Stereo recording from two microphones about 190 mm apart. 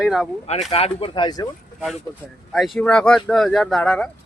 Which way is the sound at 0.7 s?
30° left (ahead or behind).